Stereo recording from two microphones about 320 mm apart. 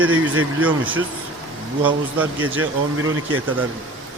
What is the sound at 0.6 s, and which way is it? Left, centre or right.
A man's voice, centre.